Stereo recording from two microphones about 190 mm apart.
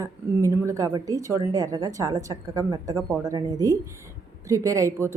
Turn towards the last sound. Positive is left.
turn(degrees=-15)  # may be behind; listen again after turning